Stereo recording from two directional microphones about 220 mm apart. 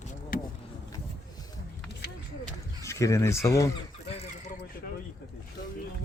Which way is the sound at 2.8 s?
15° left (ahead or behind).